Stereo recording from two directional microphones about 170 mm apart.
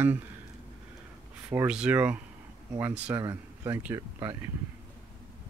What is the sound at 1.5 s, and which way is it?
Speech, 10° right (ahead or behind).